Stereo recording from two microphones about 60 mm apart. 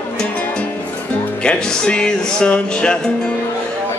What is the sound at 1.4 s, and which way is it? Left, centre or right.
Music, centre.